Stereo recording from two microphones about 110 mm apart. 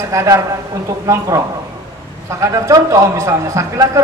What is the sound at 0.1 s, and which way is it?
A man's voice, 30° right (ahead or behind).